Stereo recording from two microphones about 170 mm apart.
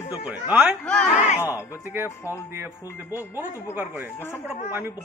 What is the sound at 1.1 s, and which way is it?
Music, 45° left (ahead or behind).